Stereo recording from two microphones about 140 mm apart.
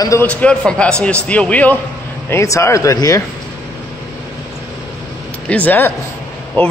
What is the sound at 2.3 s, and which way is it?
Speech, 20° left (ahead or behind).